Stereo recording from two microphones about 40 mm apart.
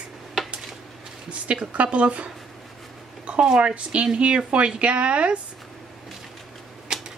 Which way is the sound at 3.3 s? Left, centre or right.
Right.